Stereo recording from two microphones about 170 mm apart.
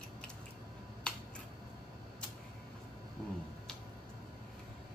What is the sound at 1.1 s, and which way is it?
Finger snapping, 5° left (ahead or behind).